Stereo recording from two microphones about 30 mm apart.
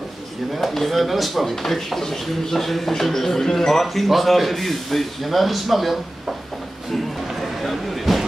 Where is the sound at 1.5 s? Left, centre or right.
Centre.